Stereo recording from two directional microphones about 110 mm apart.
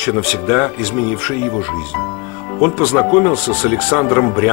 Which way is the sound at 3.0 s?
20° left (ahead or behind).